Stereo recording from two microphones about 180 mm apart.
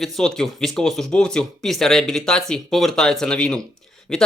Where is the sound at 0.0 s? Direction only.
Centre (ahead or behind).